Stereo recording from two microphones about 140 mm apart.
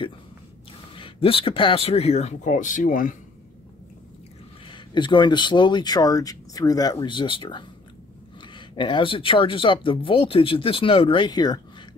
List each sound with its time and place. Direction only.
0.9 s speech: 40° left (ahead or behind); by 3.2 s 70° left (ahead or behind)
4.6 s speech: 35° left (ahead or behind)